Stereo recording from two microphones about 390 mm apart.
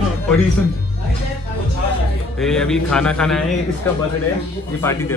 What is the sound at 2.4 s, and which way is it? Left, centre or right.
A man's voice, centre.